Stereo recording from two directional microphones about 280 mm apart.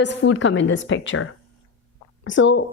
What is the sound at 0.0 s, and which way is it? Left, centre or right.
A woman's voice, left.